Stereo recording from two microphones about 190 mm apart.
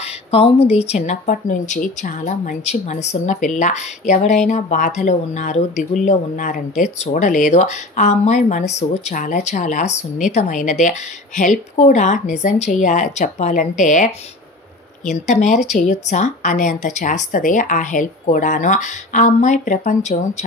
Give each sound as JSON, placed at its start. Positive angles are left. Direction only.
{"t": 0.0, "sound": "speech", "side_deg": 30}